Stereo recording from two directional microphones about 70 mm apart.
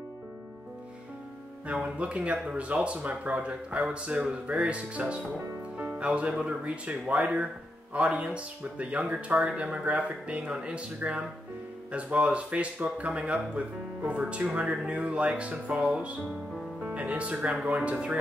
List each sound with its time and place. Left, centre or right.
1.7 s speech: centre